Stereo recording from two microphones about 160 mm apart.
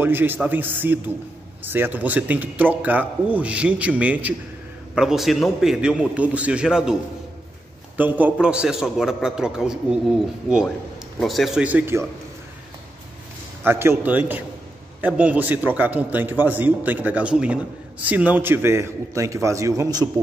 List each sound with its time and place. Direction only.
0.0 s a man's voice: 15° right (ahead or behind)
8.0 s a man's voice: 10° right (ahead or behind)
13.7 s a man's voice: 15° right (ahead or behind)